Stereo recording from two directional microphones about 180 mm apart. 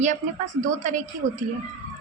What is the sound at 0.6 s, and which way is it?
Speech, 45° right (ahead or behind).